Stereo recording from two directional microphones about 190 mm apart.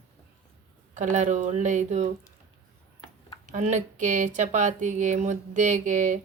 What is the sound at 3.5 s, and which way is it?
Speech, 40° right (ahead or behind).